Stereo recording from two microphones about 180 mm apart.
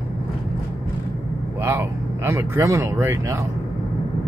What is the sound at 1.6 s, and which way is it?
Speech, 15° right (ahead or behind).